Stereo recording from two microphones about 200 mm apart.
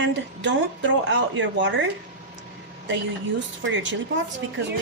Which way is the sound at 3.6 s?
70° right (ahead or behind).